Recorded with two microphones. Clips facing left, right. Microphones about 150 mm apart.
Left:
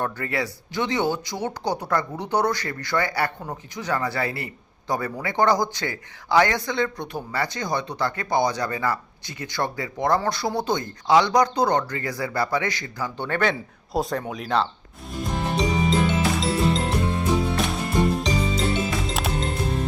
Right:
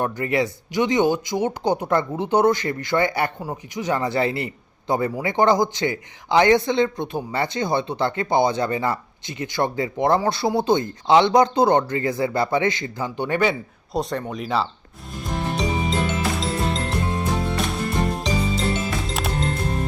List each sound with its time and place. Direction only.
0.0 s speech: 20° right (ahead or behind)
13.9 s speech: centre (ahead or behind)
15.1 s music: centre (ahead or behind)